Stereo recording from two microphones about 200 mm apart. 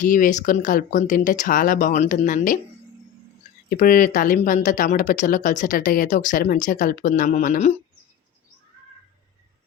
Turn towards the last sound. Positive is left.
turn(degrees=35)  # may be behind; listen again after turning